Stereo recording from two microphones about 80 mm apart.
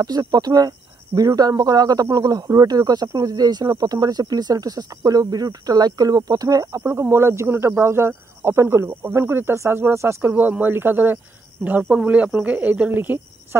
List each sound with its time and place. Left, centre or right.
0.0 s speech: right
6.8 s speech: right